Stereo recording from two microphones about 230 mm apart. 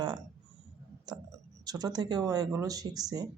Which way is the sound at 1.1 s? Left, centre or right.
Centre.